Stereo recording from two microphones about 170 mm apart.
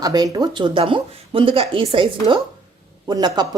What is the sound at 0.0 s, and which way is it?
Speech, 25° right (ahead or behind).